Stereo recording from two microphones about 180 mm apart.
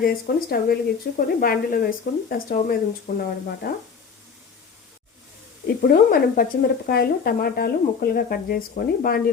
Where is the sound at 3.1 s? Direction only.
55° left (ahead or behind).